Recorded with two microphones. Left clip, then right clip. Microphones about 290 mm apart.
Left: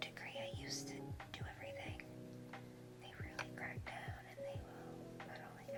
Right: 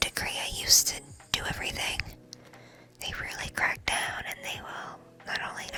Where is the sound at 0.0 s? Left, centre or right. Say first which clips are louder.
Right 17 dB; right.